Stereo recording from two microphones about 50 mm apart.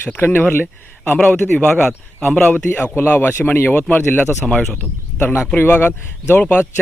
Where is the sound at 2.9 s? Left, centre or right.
Left.